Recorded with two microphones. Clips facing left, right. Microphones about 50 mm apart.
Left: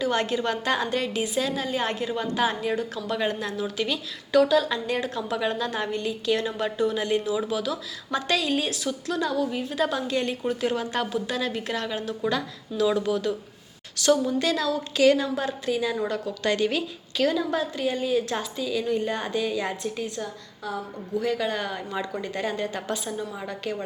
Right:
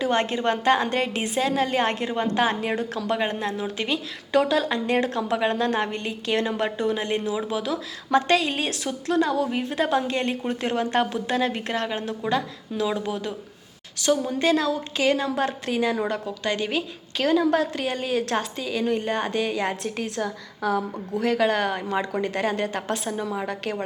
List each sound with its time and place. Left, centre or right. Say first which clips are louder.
0.0 s a woman's voice: right 2 dB; right
3.2 s a woman's voice: right 1 dB; right
12.3 s a woman's voice: right 3 dB; right
15.4 s a woman's voice: right 2 dB; right
16.2 s a woman's voice: left 2 dB; right
17.2 s a woman's voice: right 3 dB; right